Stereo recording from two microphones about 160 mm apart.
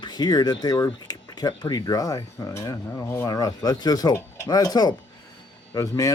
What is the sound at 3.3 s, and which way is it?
Speech, 25° left (ahead or behind).